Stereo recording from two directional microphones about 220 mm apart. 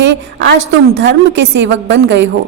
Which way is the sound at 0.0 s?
55° right (ahead or behind).